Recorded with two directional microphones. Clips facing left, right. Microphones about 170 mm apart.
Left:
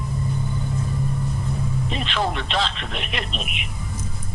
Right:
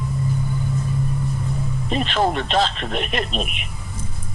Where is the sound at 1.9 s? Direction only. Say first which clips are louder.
Right 7 dB; 45° right (ahead or behind).